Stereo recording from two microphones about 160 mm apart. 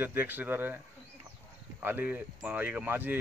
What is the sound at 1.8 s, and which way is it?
A man's voice, 10° right (ahead or behind).